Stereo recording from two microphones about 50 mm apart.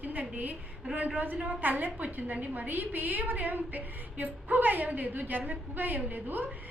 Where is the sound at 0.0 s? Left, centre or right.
Right.